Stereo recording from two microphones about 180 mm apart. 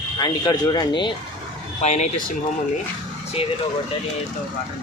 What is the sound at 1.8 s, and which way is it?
Speech, 40° left (ahead or behind).